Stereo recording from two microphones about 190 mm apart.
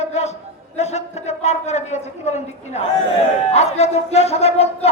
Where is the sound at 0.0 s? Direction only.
35° left (ahead or behind).